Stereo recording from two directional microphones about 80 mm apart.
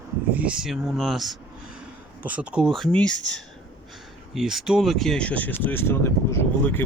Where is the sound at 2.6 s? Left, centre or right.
Centre.